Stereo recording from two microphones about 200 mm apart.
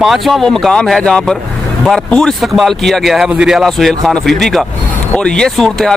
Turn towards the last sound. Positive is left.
turn(degrees=0)  # may be behind; listen again after turning